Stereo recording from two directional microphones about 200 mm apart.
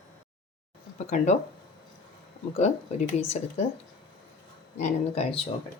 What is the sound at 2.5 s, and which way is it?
Speech, 35° left (ahead or behind).